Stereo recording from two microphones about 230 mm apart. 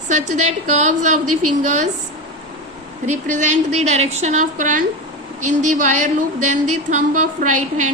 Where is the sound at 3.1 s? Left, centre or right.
Right.